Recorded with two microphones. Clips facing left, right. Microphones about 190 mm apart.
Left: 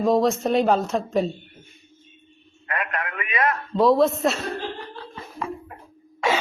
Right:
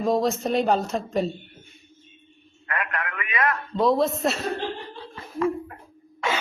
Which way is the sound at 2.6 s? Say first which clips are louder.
Left 1 dB; 25° left (ahead or behind).